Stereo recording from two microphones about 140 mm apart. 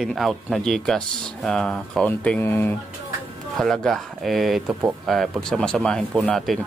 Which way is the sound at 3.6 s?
Centre (ahead or behind).